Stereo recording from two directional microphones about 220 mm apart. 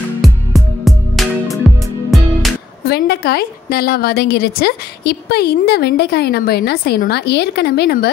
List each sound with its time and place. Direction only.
0.2 s music: centre (ahead or behind)
2.8 s a woman's voice: 45° left (ahead or behind)